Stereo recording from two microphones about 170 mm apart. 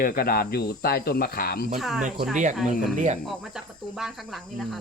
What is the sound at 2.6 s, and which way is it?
Speech, 45° right (ahead or behind).